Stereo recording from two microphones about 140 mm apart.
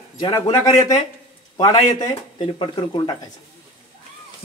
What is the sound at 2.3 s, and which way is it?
Speech, 35° left (ahead or behind).